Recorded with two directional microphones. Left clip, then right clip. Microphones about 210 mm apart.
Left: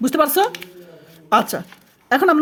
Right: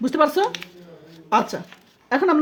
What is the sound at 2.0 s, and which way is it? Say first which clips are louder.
Speech: left 4 dB; 30° left (ahead or behind).